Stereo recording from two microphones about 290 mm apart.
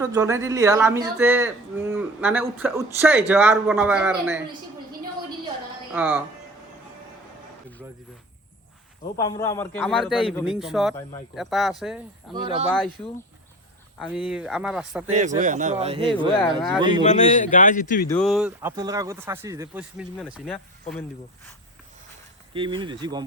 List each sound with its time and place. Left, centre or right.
0.0 s speech: centre
5.9 s a man's voice: centre
9.1 s a man's voice: centre
12.3 s speech: centre
14.0 s a man's voice: centre
15.1 s speech: right
17.0 s a man's voice: left
18.1 s a man's voice: centre
22.5 s speech: centre